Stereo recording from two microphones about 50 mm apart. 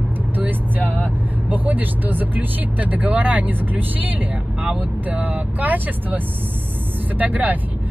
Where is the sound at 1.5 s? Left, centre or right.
Right.